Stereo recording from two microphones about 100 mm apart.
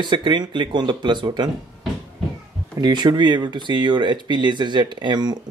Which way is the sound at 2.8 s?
45° right (ahead or behind).